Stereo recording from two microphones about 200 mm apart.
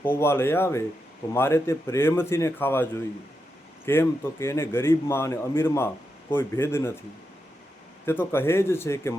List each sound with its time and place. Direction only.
0.0 s a man's voice: 10° left (ahead or behind)
8.0 s a man's voice: 10° left (ahead or behind)